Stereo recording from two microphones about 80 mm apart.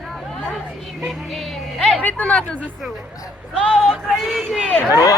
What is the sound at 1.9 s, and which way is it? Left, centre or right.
Speech, centre.